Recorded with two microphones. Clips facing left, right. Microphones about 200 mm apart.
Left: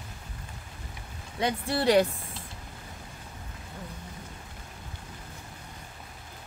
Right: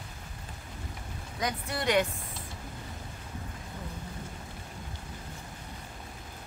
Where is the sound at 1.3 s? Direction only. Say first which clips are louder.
Left 5 dB; 30° left (ahead or behind).